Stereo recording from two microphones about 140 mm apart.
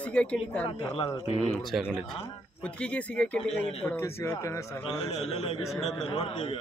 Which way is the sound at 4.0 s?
20° left (ahead or behind).